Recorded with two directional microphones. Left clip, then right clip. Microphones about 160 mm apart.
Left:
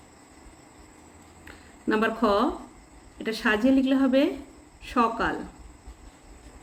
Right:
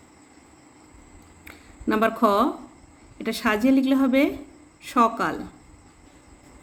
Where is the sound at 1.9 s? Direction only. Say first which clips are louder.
Right 3 dB; 40° right (ahead or behind).